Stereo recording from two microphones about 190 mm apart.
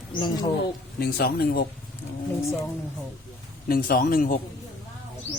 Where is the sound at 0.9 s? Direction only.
55° left (ahead or behind).